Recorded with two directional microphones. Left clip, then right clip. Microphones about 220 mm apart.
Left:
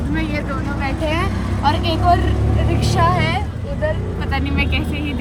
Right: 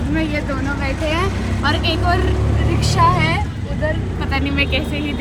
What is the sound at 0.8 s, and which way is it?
A woman's voice, 10° left (ahead or behind).